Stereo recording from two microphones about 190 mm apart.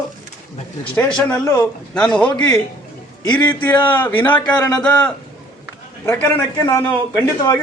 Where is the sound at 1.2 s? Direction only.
5° left (ahead or behind).